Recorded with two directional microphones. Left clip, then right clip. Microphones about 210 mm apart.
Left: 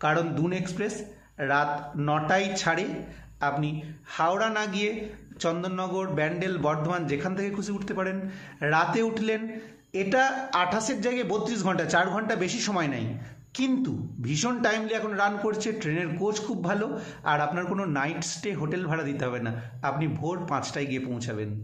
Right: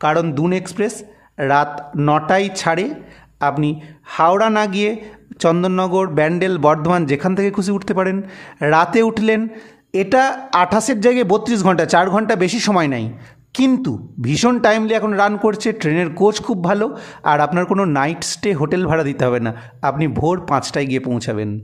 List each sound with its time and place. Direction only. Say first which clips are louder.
0.0 s a man's voice: right 9 dB; 50° right (ahead or behind)